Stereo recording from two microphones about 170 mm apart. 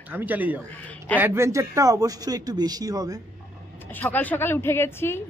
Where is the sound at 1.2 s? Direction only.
15° right (ahead or behind).